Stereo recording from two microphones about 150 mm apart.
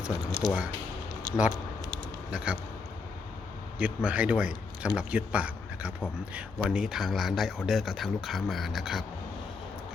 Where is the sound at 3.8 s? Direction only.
10° right (ahead or behind).